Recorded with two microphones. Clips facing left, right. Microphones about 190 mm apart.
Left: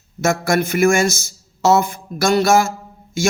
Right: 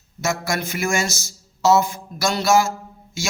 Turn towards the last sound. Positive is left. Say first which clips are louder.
# left 7 dB
turn(degrees=50)  # may be behind; listen again after turning